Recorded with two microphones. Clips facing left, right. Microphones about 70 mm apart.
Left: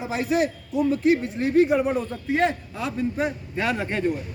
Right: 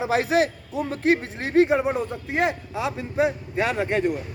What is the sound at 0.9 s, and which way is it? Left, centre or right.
Speech, right.